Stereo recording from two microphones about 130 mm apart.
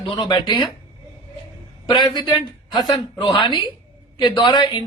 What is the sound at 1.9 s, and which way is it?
A man's voice, 35° left (ahead or behind).